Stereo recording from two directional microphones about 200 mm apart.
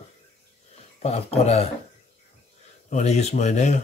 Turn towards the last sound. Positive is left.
turn(degrees=35)  # may be behind; listen again after turning